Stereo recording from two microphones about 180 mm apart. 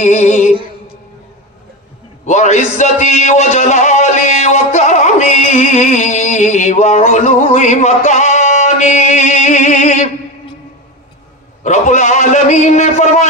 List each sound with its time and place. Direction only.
0.0 s music: 45° left (ahead or behind)
2.2 s a man's voice: 40° left (ahead or behind)
11.6 s a man's voice: 40° left (ahead or behind)